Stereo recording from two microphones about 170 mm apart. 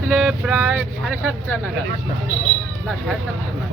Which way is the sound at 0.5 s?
10° right (ahead or behind).